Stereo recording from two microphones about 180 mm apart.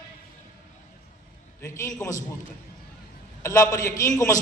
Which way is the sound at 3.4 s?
15° left (ahead or behind).